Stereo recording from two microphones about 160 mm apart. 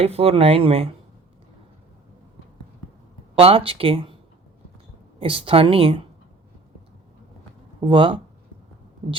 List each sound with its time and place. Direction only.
0.0 s speech: 40° right (ahead or behind)
3.3 s speech: 35° right (ahead or behind)
5.2 s speech: 35° right (ahead or behind)
7.8 s speech: 30° right (ahead or behind)